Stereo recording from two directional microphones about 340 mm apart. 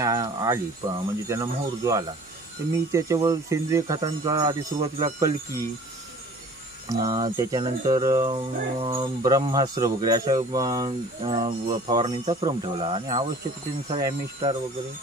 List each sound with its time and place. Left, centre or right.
0.0 s music: centre
6.9 s music: centre